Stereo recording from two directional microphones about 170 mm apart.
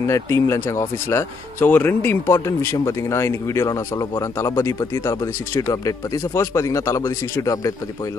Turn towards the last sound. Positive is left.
turn(degrees=20)  # may be behind; listen again after turning